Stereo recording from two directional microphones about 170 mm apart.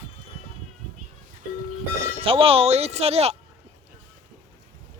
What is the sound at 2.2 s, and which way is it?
Speech, 35° right (ahead or behind).